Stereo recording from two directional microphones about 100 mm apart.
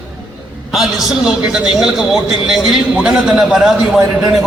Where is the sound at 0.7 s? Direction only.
5° right (ahead or behind).